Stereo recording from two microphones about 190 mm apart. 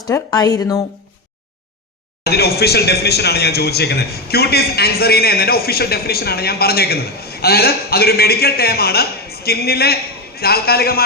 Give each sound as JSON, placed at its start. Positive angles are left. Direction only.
{"t": 0.0, "sound": "speech", "side_deg": 20}
{"t": 2.2, "sound": "speech", "side_deg": 55}